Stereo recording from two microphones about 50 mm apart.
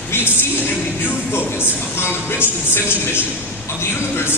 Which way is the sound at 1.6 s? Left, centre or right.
Left.